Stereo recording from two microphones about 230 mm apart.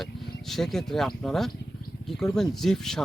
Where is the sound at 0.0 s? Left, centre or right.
Centre.